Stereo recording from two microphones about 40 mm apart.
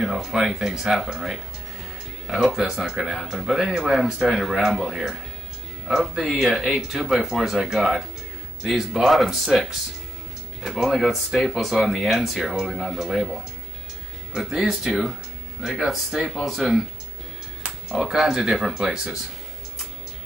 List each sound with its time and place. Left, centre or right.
0.0 s speech: centre
17.6 s music: centre
18.1 s speech: centre